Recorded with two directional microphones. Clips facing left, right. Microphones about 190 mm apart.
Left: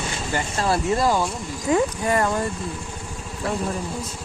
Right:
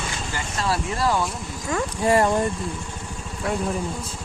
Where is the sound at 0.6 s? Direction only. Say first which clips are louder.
Left 3 dB; 20° left (ahead or behind).